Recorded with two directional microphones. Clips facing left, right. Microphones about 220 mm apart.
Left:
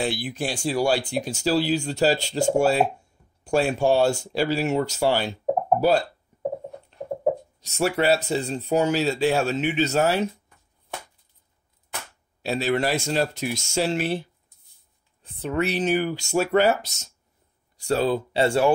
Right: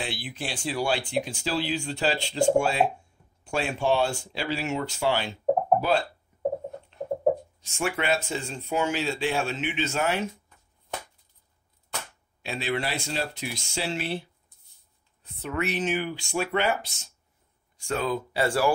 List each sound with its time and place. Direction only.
0.0 s speech: 40° left (ahead or behind)
7.0 s a sound: centre (ahead or behind)
7.6 s speech: 40° left (ahead or behind)
12.4 s speech: 40° left (ahead or behind)
15.2 s speech: 30° left (ahead or behind)